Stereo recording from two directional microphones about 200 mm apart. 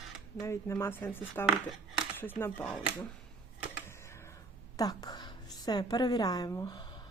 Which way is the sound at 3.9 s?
15° left (ahead or behind).